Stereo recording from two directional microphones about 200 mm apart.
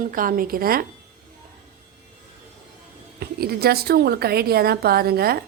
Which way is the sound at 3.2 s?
50° right (ahead or behind).